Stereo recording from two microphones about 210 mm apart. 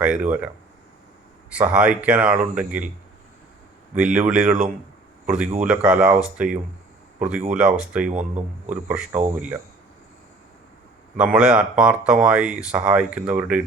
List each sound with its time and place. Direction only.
0.0 s speech: 5° right (ahead or behind)
1.5 s speech: 5° right (ahead or behind)
3.9 s speech: 5° right (ahead or behind)
8.1 s speech: 35° right (ahead or behind)
9.1 s speech: 10° right (ahead or behind)
11.2 s speech: 5° right (ahead or behind)